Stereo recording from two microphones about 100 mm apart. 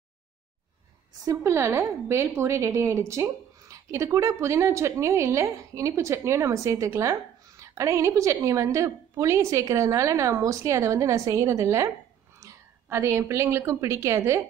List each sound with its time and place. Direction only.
1.2 s a woman's voice: 35° right (ahead or behind)